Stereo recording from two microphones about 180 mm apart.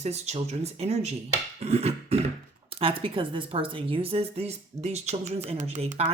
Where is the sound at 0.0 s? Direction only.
35° right (ahead or behind).